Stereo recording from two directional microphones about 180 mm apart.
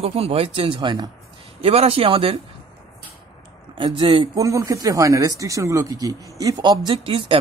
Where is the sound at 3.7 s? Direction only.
30° right (ahead or behind).